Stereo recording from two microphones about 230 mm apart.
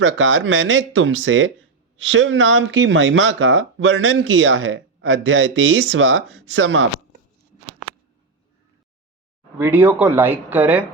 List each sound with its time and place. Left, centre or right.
0.0 s speech: right
9.6 s speech: centre